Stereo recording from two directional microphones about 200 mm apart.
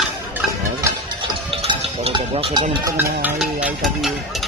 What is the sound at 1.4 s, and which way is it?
Speech, 25° right (ahead or behind).